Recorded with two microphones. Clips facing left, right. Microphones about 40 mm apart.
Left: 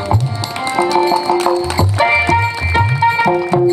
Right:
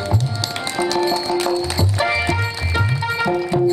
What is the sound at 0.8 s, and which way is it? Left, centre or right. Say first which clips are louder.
Music: left 6 dB; left.